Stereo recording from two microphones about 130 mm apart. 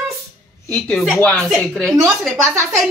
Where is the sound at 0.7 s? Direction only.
5° left (ahead or behind).